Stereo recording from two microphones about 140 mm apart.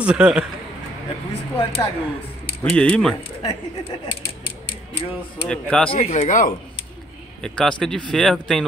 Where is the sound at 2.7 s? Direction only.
10° left (ahead or behind).